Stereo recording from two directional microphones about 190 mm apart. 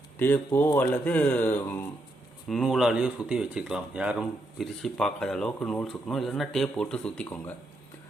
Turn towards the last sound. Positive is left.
turn(degrees=5)  # may be behind; listen again after turning